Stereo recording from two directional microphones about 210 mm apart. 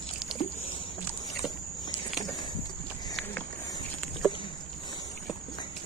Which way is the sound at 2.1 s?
Centre (ahead or behind).